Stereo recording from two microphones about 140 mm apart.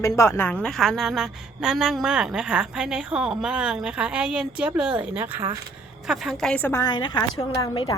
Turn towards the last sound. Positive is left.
turn(degrees=30)  # may be behind; listen again after turning